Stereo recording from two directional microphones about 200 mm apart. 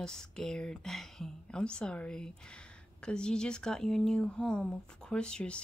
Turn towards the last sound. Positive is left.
turn(degrees=5)  # may be behind; listen again after turning